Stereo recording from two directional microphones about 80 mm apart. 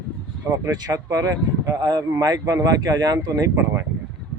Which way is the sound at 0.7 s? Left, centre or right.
Right.